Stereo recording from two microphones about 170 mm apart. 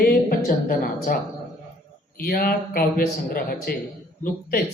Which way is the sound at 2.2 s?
60° left (ahead or behind).